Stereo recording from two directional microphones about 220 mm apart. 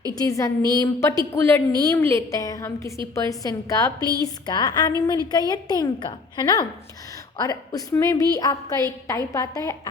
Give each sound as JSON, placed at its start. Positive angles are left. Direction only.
{"t": 0.1, "sound": "a woman's voice", "side_deg": 15}